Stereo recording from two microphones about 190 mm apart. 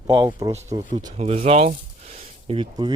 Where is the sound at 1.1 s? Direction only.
35° right (ahead or behind).